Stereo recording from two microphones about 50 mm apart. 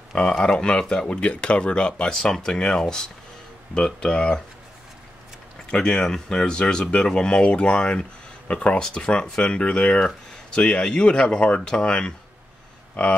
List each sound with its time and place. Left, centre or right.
0.4 s speech: centre
5.7 s speech: centre